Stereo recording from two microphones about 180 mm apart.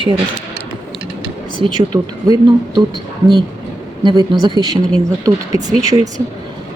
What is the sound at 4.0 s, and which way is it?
A woman's voice, 25° right (ahead or behind).